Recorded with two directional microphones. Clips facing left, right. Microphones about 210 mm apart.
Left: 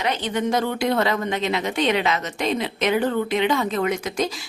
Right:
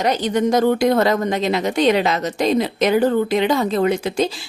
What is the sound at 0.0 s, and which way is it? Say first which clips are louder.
A woman's voice: right 6 dB; 40° right (ahead or behind).